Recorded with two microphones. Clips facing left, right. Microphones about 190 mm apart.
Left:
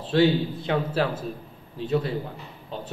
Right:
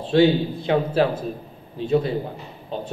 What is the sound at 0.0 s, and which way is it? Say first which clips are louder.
A man's voice: right 4 dB; 20° right (ahead or behind).